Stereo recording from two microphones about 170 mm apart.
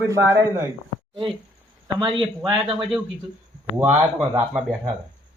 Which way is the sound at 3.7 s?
15° right (ahead or behind).